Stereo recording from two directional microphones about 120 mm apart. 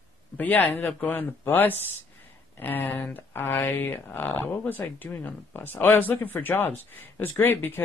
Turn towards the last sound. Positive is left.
turn(degrees=20)  # may be behind; listen again after turning